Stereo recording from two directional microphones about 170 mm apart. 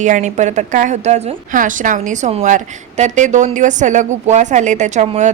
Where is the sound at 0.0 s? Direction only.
45° right (ahead or behind).